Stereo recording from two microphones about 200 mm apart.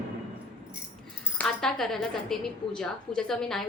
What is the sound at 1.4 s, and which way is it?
A woman's voice, centre (ahead or behind).